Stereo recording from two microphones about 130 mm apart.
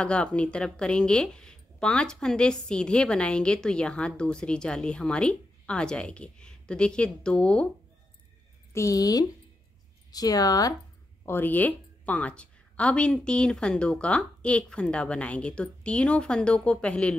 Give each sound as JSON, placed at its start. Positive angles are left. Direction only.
{"t": 0.0, "sound": "a woman's voice", "side_deg": 10}
{"t": 8.7, "sound": "speech", "side_deg": 25}
{"t": 11.2, "sound": "a woman's voice", "side_deg": 15}